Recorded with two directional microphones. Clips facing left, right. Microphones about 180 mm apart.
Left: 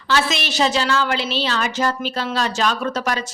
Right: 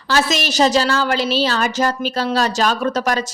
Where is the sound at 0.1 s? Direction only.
40° right (ahead or behind).